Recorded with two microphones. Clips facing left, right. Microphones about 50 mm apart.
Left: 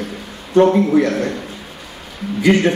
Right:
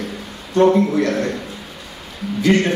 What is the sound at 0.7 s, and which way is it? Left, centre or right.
Speech, centre.